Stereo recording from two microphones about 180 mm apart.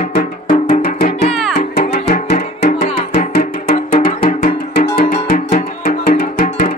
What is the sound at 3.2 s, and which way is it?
Music, 55° left (ahead or behind).